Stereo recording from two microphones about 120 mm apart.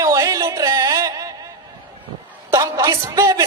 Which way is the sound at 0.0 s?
30° right (ahead or behind).